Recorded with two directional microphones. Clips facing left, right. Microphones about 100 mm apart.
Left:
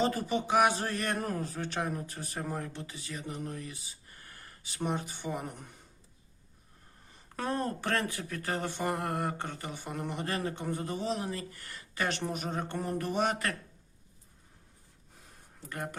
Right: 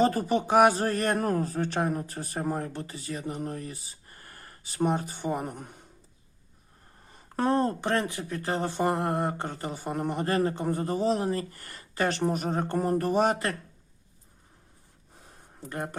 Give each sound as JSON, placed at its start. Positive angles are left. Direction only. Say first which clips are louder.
{"t": 0.0, "sound": "a man's voice", "louder": "right 6 dB", "side_deg": -45}
{"t": 7.3, "sound": "a man's voice", "louder": "right 8 dB", "side_deg": -30}
{"t": 15.7, "sound": "a man's voice", "louder": "right 4 dB", "side_deg": -30}